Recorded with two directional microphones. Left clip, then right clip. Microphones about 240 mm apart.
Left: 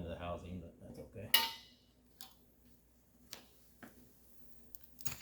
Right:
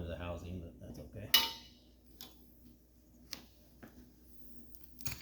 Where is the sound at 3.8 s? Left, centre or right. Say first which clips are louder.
Left 1 dB; left.